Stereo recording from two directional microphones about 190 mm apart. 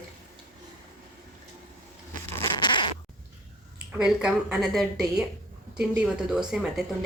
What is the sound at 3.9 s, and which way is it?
Speech, 5° right (ahead or behind).